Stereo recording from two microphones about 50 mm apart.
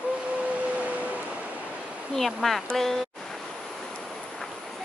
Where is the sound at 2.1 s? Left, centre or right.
Centre.